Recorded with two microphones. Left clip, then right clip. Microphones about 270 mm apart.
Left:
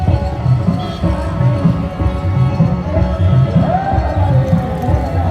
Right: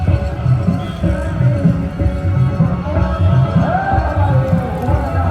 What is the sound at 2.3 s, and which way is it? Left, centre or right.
Music, left.